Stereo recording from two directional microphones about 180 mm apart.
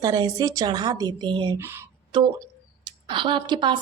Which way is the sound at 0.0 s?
20° right (ahead or behind).